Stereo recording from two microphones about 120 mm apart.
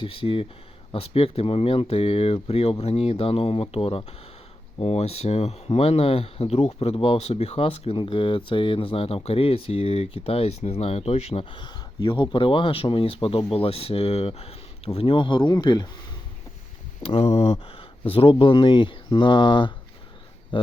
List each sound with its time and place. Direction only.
0.0 s speech: 50° left (ahead or behind)
17.2 s speech: 65° left (ahead or behind); by 20.7 s 45° left (ahead or behind)